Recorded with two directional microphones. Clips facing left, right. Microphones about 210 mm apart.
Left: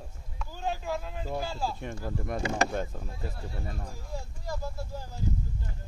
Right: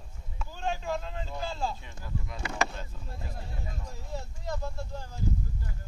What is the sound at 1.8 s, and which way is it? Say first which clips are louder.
Speech: left 6 dB; 55° left (ahead or behind).